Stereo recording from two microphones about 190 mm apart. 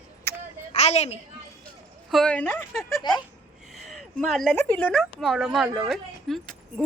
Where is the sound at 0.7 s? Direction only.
35° left (ahead or behind).